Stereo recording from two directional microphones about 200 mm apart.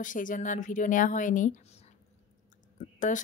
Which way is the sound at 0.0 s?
40° left (ahead or behind).